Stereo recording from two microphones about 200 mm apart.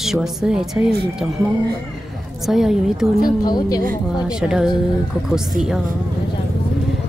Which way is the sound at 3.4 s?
20° left (ahead or behind).